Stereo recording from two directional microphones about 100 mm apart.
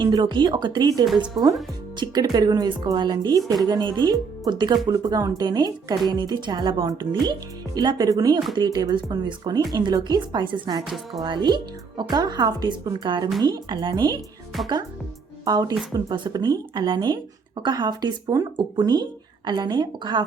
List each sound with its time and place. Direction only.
0.0 s speech: 50° right (ahead or behind)
6.8 s speech: 40° right (ahead or behind)
10.8 s a woman's voice: centre (ahead or behind)
11.2 s speech: 45° right (ahead or behind)
15.4 s speech: 40° right (ahead or behind)